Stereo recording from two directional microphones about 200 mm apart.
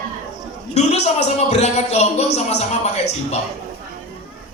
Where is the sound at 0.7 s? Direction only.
35° left (ahead or behind).